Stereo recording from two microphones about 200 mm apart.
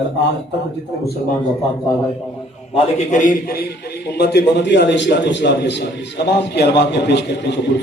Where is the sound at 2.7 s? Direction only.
40° left (ahead or behind).